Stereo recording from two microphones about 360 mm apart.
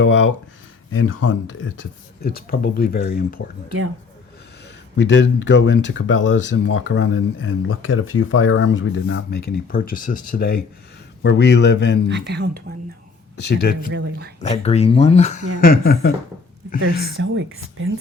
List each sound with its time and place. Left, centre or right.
0.0 s speech: left
4.9 s speech: left
12.0 s speech: right
13.9 s speech: right
14.4 s speech: centre
17.2 s speech: right